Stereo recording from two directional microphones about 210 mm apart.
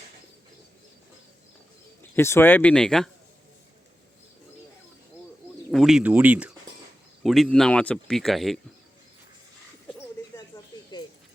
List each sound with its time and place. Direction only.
2.1 s speech: 10° left (ahead or behind)
5.7 s speech: centre (ahead or behind)
10.9 s a sound: 20° left (ahead or behind)